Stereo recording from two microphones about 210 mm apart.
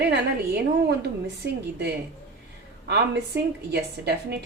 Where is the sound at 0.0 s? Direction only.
50° right (ahead or behind).